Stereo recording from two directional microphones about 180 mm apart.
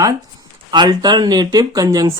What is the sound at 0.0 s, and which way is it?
Speech, 20° right (ahead or behind).